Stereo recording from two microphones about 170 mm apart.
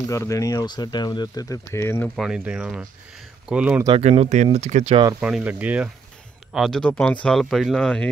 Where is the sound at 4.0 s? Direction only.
40° right (ahead or behind).